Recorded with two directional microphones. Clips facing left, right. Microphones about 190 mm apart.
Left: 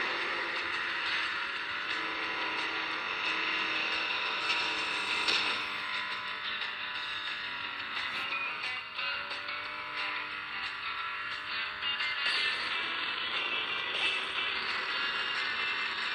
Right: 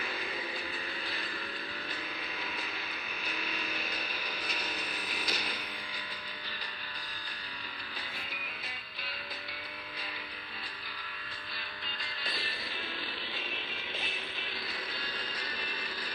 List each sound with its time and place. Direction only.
3.7 s a sound: 15° right (ahead or behind)
4.9 s music: 40° right (ahead or behind)
12.0 s music: 40° right (ahead or behind)
13.6 s music: 5° right (ahead or behind)
14.4 s music: 40° right (ahead or behind)